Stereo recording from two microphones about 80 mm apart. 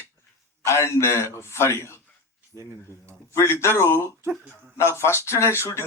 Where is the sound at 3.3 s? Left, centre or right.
Left.